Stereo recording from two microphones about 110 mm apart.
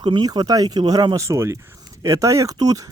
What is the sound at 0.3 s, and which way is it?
Speech, 35° right (ahead or behind).